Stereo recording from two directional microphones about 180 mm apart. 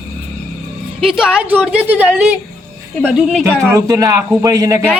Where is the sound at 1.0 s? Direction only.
5° right (ahead or behind).